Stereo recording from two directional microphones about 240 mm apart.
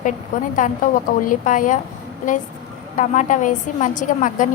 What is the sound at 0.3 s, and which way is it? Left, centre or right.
A woman's voice, left.